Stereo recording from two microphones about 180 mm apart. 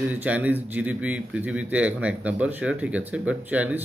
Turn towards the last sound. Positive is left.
turn(degrees=-10)  # may be behind; listen again after turning